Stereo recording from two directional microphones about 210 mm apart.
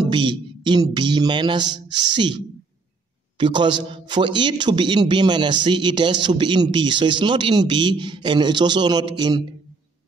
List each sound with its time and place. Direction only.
0.1 s a man's voice: 20° right (ahead or behind)